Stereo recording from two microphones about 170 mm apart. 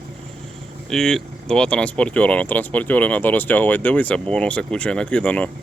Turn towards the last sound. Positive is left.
turn(degrees=5)  # may be behind; listen again after turning